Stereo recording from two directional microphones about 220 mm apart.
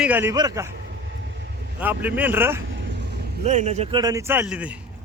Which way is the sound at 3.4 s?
30° right (ahead or behind).